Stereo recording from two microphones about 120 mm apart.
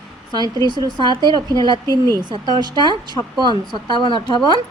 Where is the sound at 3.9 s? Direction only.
40° left (ahead or behind).